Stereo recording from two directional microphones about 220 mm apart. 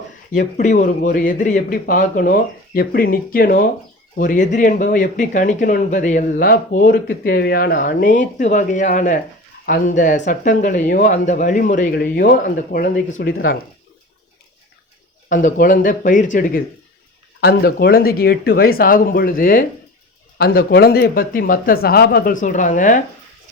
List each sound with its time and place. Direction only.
0.3 s speech: 35° left (ahead or behind)
13.1 s speech: 60° left (ahead or behind)
15.3 s speech: 35° left (ahead or behind)